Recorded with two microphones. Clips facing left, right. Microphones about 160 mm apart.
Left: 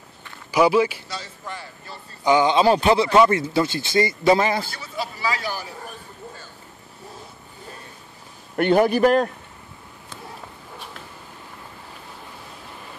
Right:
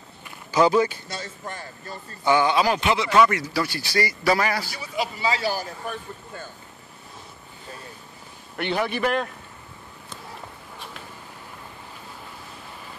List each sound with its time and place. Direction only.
0.5 s a man's voice: 10° left (ahead or behind)
1.0 s speech: 50° right (ahead or behind)
2.2 s speech: 20° left (ahead or behind)
4.7 s speech: 15° right (ahead or behind); by 5.7 s 35° right (ahead or behind)
8.5 s a man's voice: 45° left (ahead or behind)